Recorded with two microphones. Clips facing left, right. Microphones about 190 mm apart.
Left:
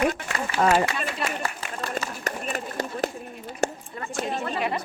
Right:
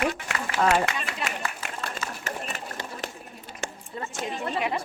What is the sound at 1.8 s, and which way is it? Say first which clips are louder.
Run: left 4 dB; 40° left (ahead or behind).